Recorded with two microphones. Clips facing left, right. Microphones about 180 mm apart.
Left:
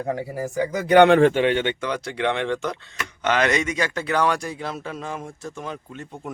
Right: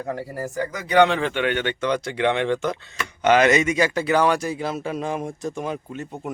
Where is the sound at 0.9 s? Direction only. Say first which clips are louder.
Left 5 dB; 55° left (ahead or behind).